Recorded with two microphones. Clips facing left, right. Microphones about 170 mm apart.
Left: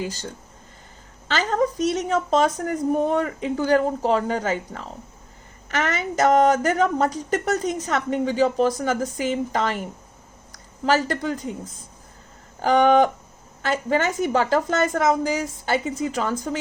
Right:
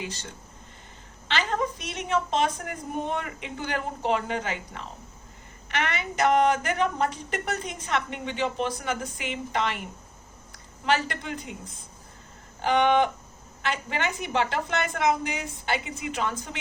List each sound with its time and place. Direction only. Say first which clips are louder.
0.0 s speech: left 7 dB; 40° left (ahead or behind)
1.3 s speech: left 6 dB; 40° left (ahead or behind)
10.8 s speech: left 5 dB; 40° left (ahead or behind)
12.6 s speech: left 5 dB; 40° left (ahead or behind)